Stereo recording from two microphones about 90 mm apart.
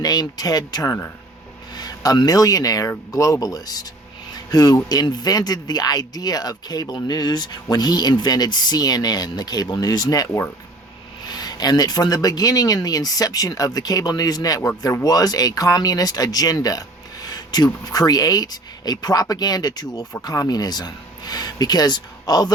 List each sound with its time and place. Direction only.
0.0 s speech: 45° left (ahead or behind)